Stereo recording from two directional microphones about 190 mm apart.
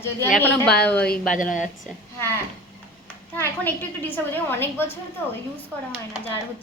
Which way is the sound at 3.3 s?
10° left (ahead or behind).